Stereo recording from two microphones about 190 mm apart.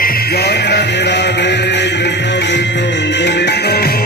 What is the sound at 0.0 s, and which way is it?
Music, 50° left (ahead or behind).